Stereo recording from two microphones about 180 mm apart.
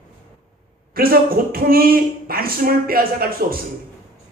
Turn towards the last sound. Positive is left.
turn(degrees=-55)  # may be behind; listen again after turning